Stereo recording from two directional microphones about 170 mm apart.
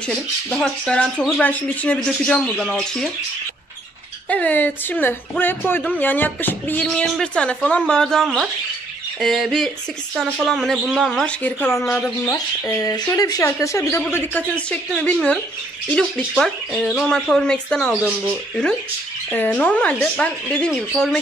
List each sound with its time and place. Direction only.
0.0 s speech: 5° left (ahead or behind)
4.3 s speech: 10° left (ahead or behind)
16.3 s speech: centre (ahead or behind)
19.3 s speech: 10° left (ahead or behind)